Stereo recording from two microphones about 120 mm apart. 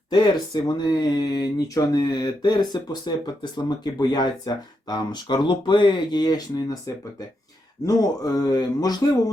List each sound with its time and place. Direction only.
0.1 s speech: 35° left (ahead or behind)